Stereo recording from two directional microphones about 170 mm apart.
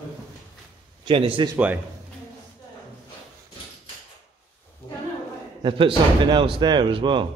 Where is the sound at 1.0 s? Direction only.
30° right (ahead or behind).